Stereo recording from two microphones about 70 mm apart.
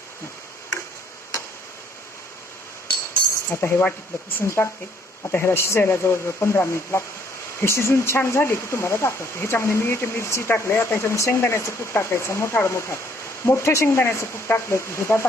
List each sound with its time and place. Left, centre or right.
3.5 s speech: left